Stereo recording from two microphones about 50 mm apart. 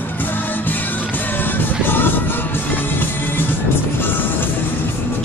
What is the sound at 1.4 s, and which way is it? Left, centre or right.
Music, left.